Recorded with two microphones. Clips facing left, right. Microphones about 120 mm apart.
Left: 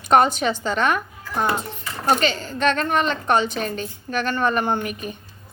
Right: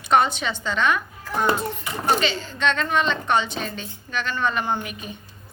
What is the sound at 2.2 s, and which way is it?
A woman's voice, 50° left (ahead or behind).